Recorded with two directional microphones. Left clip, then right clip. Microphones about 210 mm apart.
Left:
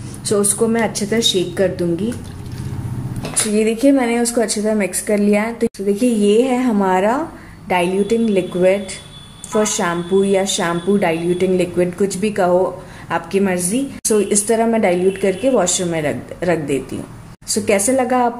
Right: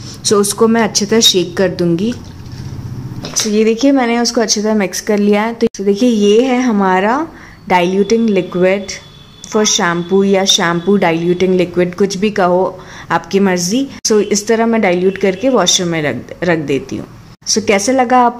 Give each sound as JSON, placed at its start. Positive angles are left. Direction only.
{"t": 0.2, "sound": "a woman's voice", "side_deg": -50}
{"t": 3.5, "sound": "a woman's voice", "side_deg": -40}
{"t": 7.6, "sound": "a woman's voice", "side_deg": -45}
{"t": 14.0, "sound": "a woman's voice", "side_deg": -35}